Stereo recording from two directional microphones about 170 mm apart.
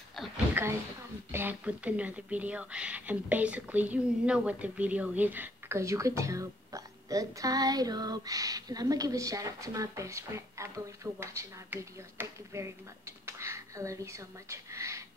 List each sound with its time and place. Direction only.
0.6 s speech: 10° right (ahead or behind)